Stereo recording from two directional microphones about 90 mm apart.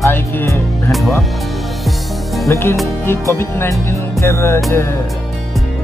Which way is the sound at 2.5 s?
30° left (ahead or behind).